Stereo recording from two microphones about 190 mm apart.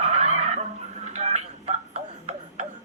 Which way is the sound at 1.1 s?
35° right (ahead or behind).